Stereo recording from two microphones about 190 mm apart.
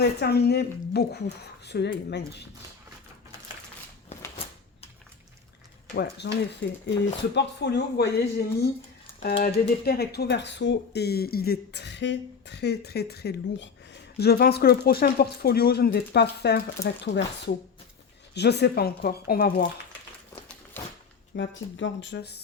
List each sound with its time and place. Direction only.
0.0 s speech: 60° left (ahead or behind)
5.9 s speech: 60° left (ahead or behind)
21.3 s speech: 75° left (ahead or behind)